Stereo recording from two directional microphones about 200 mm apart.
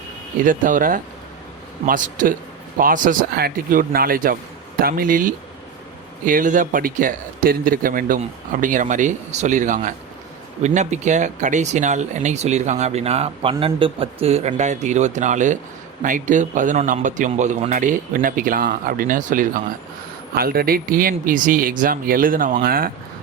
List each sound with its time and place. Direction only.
0.4 s speech: 40° right (ahead or behind)